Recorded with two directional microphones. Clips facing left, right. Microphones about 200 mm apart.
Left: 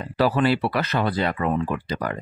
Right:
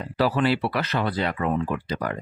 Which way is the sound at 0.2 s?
45° left (ahead or behind).